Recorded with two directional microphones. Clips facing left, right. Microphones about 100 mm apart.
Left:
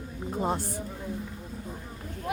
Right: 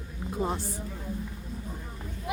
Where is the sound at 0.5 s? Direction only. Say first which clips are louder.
Left 3 dB; 55° left (ahead or behind).